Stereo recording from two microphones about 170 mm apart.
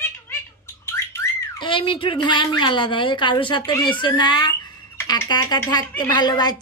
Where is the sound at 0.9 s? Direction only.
15° left (ahead or behind).